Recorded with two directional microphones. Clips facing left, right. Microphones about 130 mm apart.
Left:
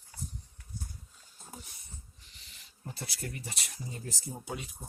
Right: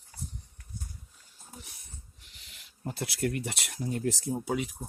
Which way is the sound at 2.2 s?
70° right (ahead or behind).